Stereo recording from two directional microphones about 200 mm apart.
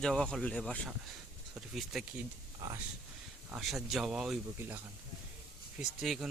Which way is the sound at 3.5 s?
Centre (ahead or behind).